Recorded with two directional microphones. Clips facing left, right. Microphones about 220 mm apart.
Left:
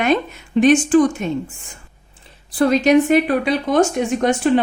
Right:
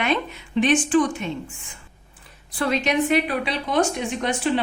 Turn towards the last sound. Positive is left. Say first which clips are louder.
# left 8 dB
turn(degrees=45)  # may be behind; listen again after turning